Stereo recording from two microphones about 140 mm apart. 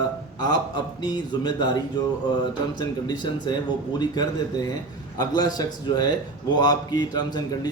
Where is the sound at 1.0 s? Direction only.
30° left (ahead or behind).